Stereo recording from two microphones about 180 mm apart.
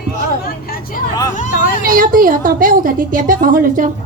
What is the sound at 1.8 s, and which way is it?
A woman's voice, 50° right (ahead or behind).